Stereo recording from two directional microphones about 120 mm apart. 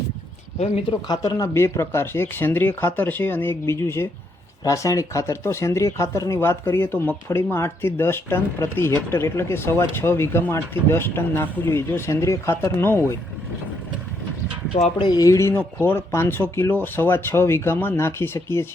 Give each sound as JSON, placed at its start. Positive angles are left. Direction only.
{"t": 0.9, "sound": "speech", "side_deg": 35}
{"t": 14.9, "sound": "speech", "side_deg": 35}